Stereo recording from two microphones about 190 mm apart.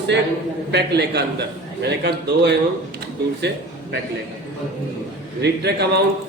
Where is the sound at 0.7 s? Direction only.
60° right (ahead or behind).